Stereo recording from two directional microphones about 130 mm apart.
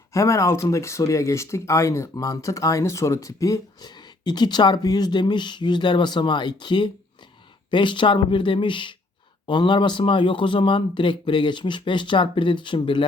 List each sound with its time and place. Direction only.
0.1 s speech: 25° left (ahead or behind)